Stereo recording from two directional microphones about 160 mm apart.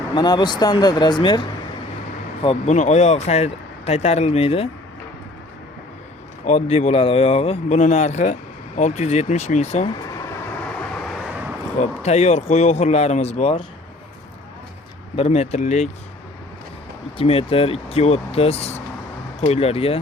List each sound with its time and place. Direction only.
0.2 s speech: 25° left (ahead or behind)
2.4 s speech: 40° left (ahead or behind)
6.4 s speech: 45° left (ahead or behind)
10.1 s vehicle: 20° left (ahead or behind); by 11.5 s 5° right (ahead or behind)
11.8 s speech: 45° left (ahead or behind)
15.1 s speech: 40° left (ahead or behind)
17.2 s speech: 35° left (ahead or behind)